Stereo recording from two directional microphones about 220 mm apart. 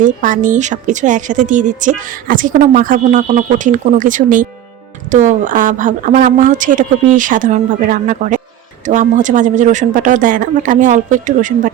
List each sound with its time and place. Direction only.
0.0 s a woman's voice: 35° right (ahead or behind)